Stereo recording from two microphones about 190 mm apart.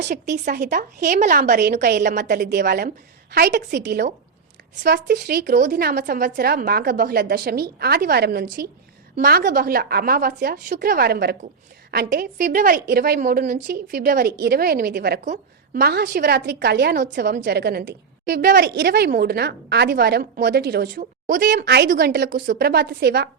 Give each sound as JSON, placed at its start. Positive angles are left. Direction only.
{"t": 0.4, "sound": "a woman's voice", "side_deg": -55}
{"t": 21.6, "sound": "a woman's voice", "side_deg": -60}